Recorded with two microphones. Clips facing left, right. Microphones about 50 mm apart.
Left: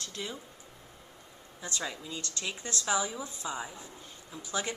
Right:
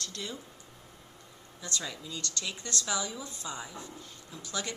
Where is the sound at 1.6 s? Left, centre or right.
Left.